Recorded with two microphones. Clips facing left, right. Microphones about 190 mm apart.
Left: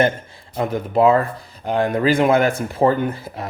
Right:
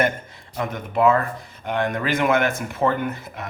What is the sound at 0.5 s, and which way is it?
Speech, 30° left (ahead or behind).